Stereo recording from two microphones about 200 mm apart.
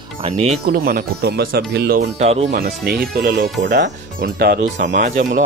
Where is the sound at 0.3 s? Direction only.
35° right (ahead or behind).